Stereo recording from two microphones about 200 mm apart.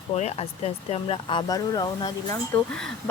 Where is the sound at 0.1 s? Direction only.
35° left (ahead or behind).